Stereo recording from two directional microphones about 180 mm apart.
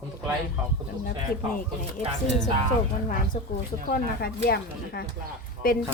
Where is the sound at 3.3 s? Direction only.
50° left (ahead or behind).